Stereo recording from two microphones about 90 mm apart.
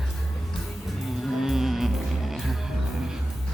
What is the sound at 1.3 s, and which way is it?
Music, 5° right (ahead or behind).